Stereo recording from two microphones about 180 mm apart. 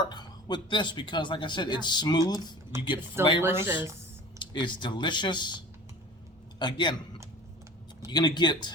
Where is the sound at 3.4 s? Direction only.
10° right (ahead or behind).